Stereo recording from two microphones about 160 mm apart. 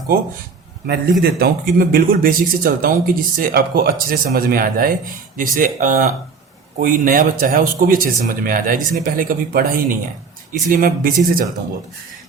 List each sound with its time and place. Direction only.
1.2 s speech: 70° right (ahead or behind)